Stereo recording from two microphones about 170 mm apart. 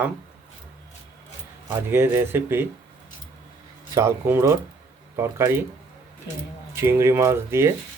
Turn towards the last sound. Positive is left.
turn(degrees=-15)  # may be behind; listen again after turning